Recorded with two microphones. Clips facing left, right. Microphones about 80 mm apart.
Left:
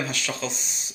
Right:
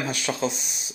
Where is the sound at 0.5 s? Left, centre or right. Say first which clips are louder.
Even; left.